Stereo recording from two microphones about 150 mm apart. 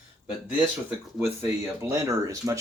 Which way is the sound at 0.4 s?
10° right (ahead or behind).